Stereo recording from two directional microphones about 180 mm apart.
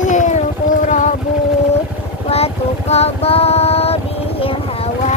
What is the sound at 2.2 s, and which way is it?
Child singing, 35° left (ahead or behind).